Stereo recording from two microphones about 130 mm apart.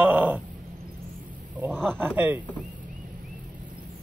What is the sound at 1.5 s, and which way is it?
Speech, 15° right (ahead or behind).